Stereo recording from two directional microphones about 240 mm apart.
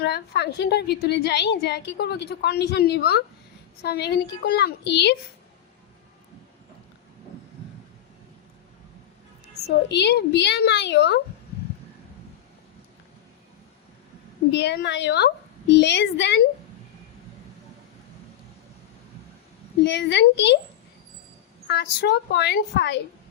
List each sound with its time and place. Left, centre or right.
0.0 s a woman's voice: left
9.6 s a woman's voice: left
14.5 s a woman's voice: left
19.8 s a woman's voice: left
21.7 s a woman's voice: left